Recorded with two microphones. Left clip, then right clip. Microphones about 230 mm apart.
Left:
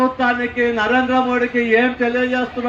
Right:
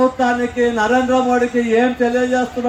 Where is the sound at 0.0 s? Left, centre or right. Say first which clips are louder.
Right 2 dB; right.